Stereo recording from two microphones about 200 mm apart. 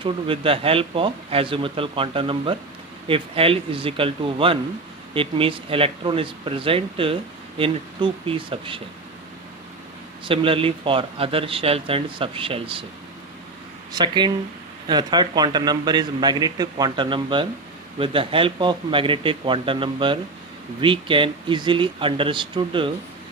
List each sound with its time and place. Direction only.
0.0 s speech: 25° right (ahead or behind)
10.2 s speech: 25° right (ahead or behind)
13.9 s speech: 20° right (ahead or behind)